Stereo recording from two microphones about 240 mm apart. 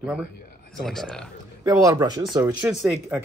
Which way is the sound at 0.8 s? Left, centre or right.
Centre.